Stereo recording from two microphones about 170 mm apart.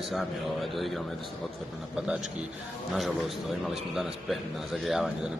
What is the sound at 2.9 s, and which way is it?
A man's voice, centre (ahead or behind).